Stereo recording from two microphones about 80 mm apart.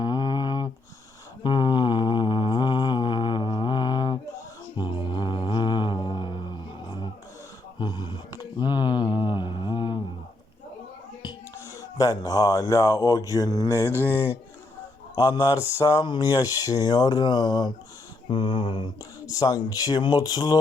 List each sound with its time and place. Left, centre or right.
0.0 s a sound: left
1.5 s mantra: left
7.8 s a sound: left
11.8 s speech: left
13.9 s speech: right
15.1 s speech: left
16.0 s speech: left
18.3 s mantra: left
19.2 s speech: left